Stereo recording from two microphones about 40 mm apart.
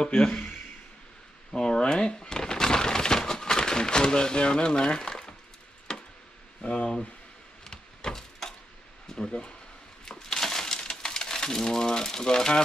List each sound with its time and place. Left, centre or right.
0.2 s speech: left
1.5 s a sound: centre
6.6 s speech: left
7.6 s a sound: centre
9.0 s speech: centre
10.1 s crushing: centre